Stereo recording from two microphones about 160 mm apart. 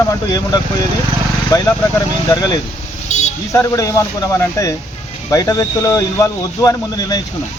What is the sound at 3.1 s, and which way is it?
Vehicle, 50° left (ahead or behind).